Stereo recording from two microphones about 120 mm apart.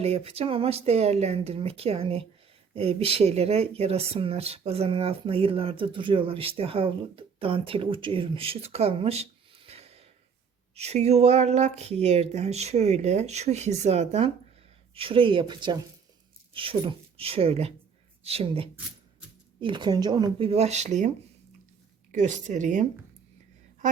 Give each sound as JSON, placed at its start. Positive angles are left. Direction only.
{"t": 0.0, "sound": "speech", "side_deg": -55}
{"t": 14.9, "sound": "speech", "side_deg": -50}
{"t": 19.5, "sound": "speech", "side_deg": -40}
{"t": 20.4, "sound": "speech", "side_deg": -60}
{"t": 22.1, "sound": "speech", "side_deg": -90}